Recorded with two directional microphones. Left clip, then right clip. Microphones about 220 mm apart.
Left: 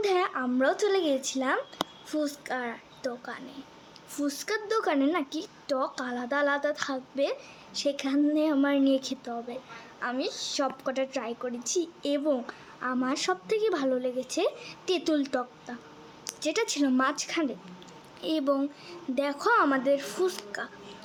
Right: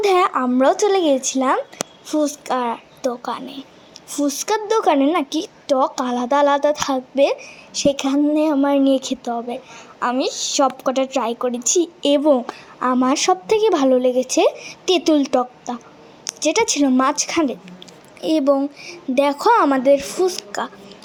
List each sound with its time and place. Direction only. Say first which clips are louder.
0.0 s a woman's voice: right 11 dB; 20° right (ahead or behind)